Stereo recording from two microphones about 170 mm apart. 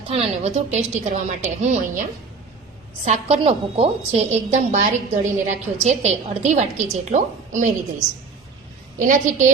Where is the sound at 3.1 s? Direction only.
35° right (ahead or behind).